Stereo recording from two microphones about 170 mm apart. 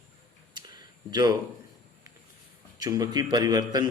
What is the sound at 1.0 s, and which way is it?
Speech, 25° right (ahead or behind).